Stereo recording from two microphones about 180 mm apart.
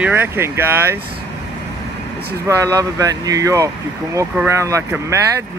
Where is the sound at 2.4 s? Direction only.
15° right (ahead or behind).